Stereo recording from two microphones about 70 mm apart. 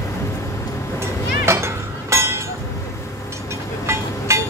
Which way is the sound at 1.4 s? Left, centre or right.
Right.